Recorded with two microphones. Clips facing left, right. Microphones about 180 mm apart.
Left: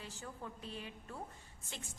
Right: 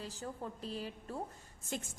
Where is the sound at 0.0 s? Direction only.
35° right (ahead or behind).